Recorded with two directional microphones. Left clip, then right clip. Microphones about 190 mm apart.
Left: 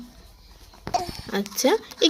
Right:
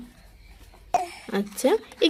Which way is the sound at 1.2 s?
5° right (ahead or behind).